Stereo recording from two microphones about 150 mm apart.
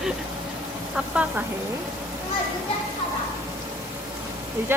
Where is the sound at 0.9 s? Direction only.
10° right (ahead or behind).